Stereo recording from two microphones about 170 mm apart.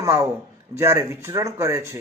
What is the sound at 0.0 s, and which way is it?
A man's voice, 15° right (ahead or behind).